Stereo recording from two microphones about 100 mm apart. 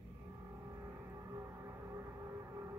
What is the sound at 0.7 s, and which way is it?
Music, 30° right (ahead or behind).